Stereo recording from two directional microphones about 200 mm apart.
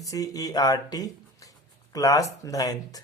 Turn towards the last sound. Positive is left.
turn(degrees=20)  # may be behind; listen again after turning